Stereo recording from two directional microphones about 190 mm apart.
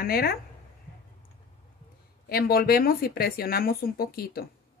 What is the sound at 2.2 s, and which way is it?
Speech, 55° left (ahead or behind).